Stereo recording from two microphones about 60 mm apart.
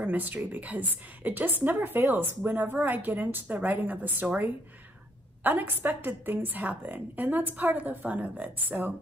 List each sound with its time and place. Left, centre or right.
0.0 s a woman's voice: right
5.4 s a woman's voice: right